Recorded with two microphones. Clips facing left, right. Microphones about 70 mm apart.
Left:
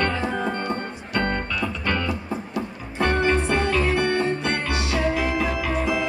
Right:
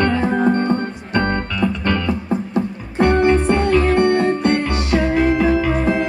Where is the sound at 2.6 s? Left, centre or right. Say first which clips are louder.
Right 7 dB; right.